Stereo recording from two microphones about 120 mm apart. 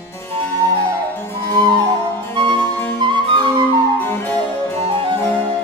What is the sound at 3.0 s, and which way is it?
Flute, 40° right (ahead or behind).